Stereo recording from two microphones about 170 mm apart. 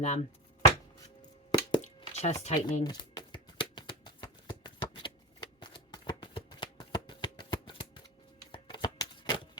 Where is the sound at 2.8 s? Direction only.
25° left (ahead or behind).